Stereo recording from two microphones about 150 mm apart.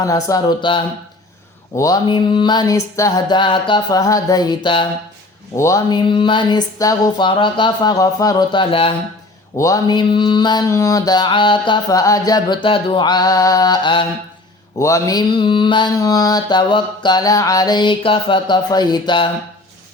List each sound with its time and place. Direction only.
0.0 s mantra: 20° left (ahead or behind)
5.5 s mantra: 20° left (ahead or behind)
9.6 s mantra: 20° left (ahead or behind)